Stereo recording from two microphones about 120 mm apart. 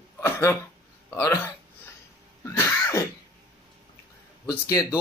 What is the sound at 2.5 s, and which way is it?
Cough, 25° left (ahead or behind).